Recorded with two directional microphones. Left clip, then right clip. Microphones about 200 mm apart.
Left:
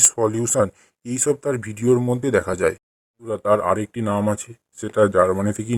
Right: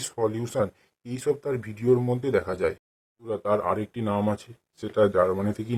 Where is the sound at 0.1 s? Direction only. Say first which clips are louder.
Left 6 dB; 35° left (ahead or behind).